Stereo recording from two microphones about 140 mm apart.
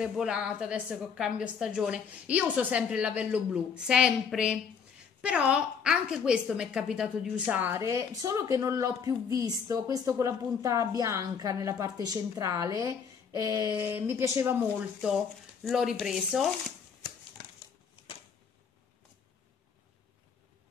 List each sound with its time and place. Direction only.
0.0 s a woman's voice: 5° right (ahead or behind); by 13.7 s 25° right (ahead or behind)
13.7 s a woman's voice: 15° right (ahead or behind)
15.0 s a woman's voice: centre (ahead or behind)